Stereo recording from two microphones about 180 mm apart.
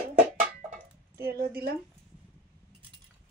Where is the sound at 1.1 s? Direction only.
60° right (ahead or behind).